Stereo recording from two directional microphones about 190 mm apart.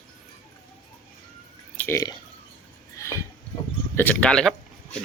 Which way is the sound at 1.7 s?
10° left (ahead or behind).